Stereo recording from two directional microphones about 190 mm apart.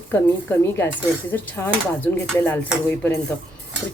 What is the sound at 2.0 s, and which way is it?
Speech, 10° left (ahead or behind).